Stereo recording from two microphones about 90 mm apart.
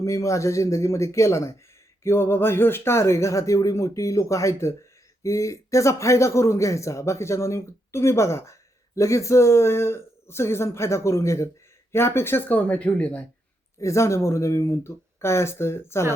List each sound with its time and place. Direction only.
0.0 s a man's voice: 35° left (ahead or behind); by 13.2 s 15° left (ahead or behind)
13.7 s a man's voice: 35° left (ahead or behind)